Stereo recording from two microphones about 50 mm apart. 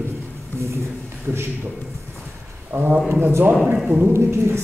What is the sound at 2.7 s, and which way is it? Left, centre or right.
Speech, right.